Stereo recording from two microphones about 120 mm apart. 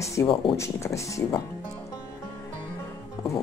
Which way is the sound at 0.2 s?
25° left (ahead or behind).